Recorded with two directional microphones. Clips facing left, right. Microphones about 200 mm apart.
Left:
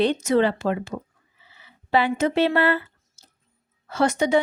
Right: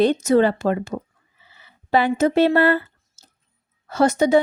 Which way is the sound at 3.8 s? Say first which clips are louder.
Right 4 dB; 40° right (ahead or behind).